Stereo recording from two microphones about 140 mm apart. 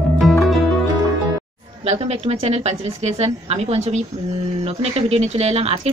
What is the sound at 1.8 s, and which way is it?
Speech, 45° right (ahead or behind).